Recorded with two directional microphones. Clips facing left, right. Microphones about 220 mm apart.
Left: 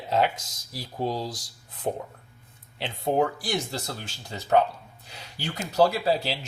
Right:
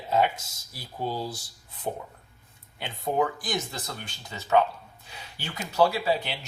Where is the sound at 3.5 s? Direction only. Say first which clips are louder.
Left 2 dB; 70° left (ahead or behind).